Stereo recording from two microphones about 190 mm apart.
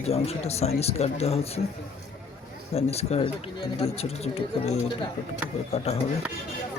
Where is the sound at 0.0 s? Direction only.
35° left (ahead or behind).